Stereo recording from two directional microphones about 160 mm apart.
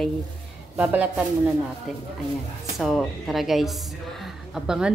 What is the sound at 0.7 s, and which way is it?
Speech, 10° right (ahead or behind).